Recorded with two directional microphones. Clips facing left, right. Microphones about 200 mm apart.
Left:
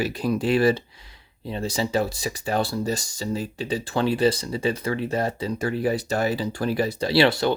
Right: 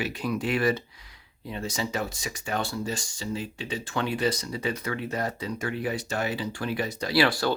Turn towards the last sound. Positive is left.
turn(degrees=25)  # may be behind; listen again after turning